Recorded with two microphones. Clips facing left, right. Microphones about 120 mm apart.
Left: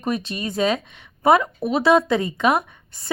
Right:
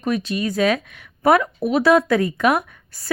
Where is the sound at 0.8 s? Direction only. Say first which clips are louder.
Even; 25° left (ahead or behind).